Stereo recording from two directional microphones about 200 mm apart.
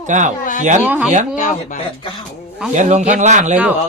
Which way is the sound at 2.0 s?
25° left (ahead or behind).